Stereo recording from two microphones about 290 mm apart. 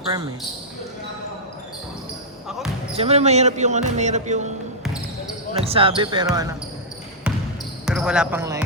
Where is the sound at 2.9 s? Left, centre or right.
Right.